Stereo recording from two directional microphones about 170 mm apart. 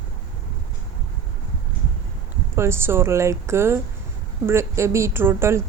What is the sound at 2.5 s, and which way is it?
Speech, 15° right (ahead or behind).